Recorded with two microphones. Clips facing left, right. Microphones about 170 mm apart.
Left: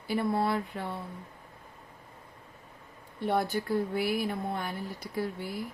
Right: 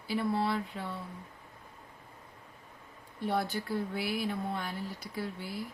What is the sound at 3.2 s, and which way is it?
A woman's voice, 60° left (ahead or behind).